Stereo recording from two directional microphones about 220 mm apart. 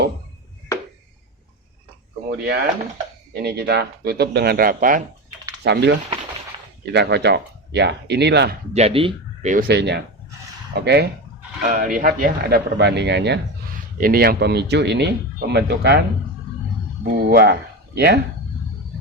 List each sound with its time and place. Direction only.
2.3 s speech: 45° right (ahead or behind)
5.6 s speech: 50° right (ahead or behind)
8.7 s speech: 25° right (ahead or behind)
9.6 s speech: 50° right (ahead or behind)
11.6 s speech: 35° right (ahead or behind)
17.0 s speech: 45° right (ahead or behind)